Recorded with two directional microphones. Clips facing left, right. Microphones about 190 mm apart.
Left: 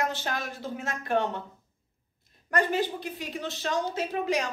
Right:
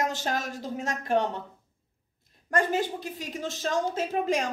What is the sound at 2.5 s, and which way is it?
A woman's voice, 45° right (ahead or behind).